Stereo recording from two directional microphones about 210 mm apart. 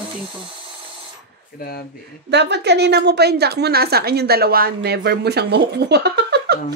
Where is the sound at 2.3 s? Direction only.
55° right (ahead or behind).